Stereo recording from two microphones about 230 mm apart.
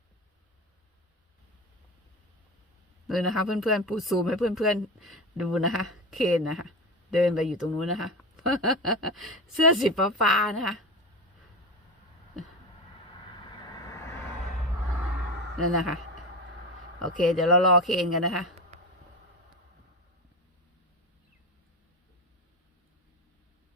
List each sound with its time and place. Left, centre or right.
3.1 s speech: centre
13.1 s vehicle: left
17.0 s speech: centre